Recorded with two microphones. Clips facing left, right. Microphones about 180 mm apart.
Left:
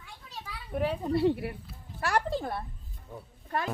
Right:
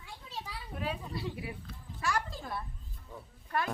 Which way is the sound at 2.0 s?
65° left (ahead or behind).